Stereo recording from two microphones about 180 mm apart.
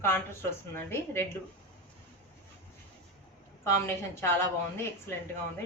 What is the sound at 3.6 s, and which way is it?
Speech, 15° left (ahead or behind).